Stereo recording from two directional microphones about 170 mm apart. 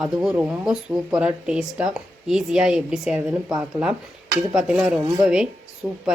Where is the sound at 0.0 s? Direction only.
5° right (ahead or behind).